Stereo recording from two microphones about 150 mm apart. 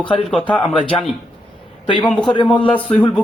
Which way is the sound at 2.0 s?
5° left (ahead or behind).